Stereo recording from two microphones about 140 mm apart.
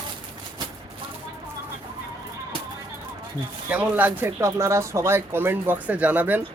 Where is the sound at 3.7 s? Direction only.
10° right (ahead or behind).